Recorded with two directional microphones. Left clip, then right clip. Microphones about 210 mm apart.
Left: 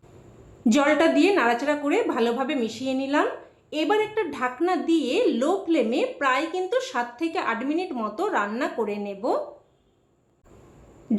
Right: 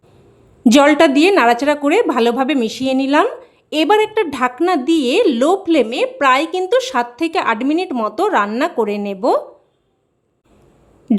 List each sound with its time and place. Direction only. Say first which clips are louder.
0.6 s a woman's voice: right 10 dB; 50° right (ahead or behind)